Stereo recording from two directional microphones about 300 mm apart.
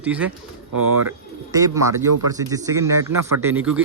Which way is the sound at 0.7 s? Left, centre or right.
Right.